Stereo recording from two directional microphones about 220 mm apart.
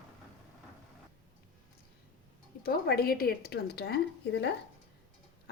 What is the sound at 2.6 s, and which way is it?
Speech, 45° left (ahead or behind).